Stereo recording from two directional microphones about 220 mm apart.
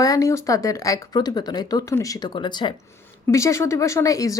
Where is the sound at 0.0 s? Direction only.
15° left (ahead or behind).